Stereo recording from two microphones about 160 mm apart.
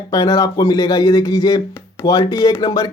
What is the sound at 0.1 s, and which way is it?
Speech, 20° left (ahead or behind).